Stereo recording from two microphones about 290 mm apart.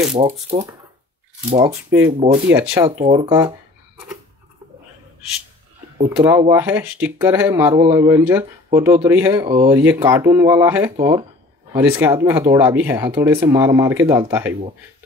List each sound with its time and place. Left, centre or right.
0.2 s speech: right
1.6 s speech: centre
3.0 s speech: centre
5.9 s speech: centre